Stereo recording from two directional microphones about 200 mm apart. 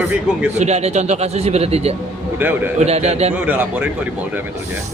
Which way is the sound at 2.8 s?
35° right (ahead or behind).